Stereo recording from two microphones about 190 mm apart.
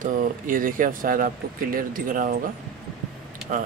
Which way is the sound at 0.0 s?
45° right (ahead or behind).